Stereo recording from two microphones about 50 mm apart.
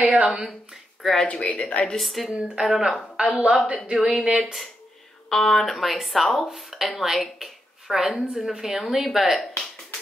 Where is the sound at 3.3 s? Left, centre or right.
Right.